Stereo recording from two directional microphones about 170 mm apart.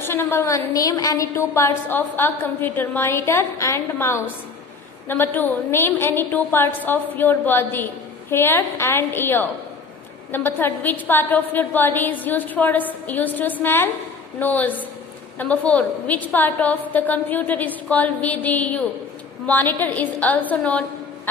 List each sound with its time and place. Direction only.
0.0 s a woman's voice: 15° left (ahead or behind)